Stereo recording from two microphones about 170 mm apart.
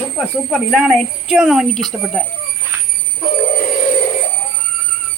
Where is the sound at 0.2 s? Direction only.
Centre (ahead or behind).